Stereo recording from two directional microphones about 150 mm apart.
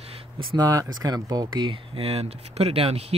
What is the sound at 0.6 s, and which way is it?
Speech, 25° right (ahead or behind).